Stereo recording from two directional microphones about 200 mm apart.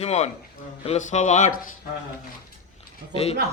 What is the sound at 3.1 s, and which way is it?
Speech, 30° left (ahead or behind).